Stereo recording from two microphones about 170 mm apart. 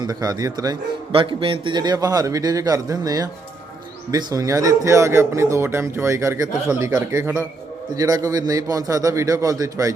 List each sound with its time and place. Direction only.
0.0 s a man's voice: 20° right (ahead or behind)